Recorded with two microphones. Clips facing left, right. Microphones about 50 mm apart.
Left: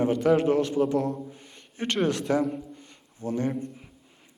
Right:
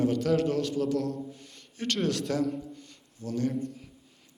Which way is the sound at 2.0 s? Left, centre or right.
Centre.